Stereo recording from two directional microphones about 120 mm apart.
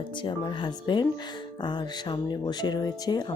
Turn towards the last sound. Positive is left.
turn(degrees=35)  # may be behind; listen again after turning